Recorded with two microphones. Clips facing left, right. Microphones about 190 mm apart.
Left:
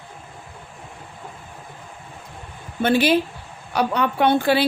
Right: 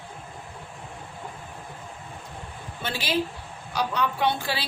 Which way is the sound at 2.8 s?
60° left (ahead or behind).